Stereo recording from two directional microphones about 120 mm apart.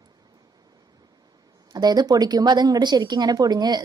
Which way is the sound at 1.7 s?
35° right (ahead or behind).